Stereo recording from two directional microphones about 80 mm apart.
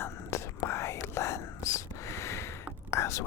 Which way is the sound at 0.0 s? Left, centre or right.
Left.